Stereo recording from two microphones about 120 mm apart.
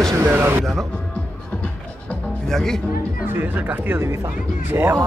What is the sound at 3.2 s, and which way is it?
Speech, 15° right (ahead or behind).